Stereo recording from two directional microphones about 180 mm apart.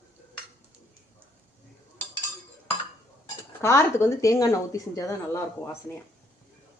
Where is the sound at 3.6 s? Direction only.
15° left (ahead or behind).